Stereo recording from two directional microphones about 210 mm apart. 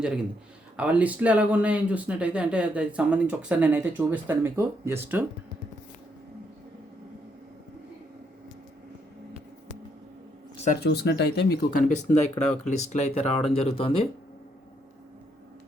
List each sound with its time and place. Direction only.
0.8 s speech: 5° right (ahead or behind)
10.8 s speech: 50° left (ahead or behind); by 14.0 s 25° left (ahead or behind)